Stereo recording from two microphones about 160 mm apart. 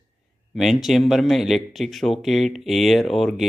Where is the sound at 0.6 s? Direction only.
Centre (ahead or behind).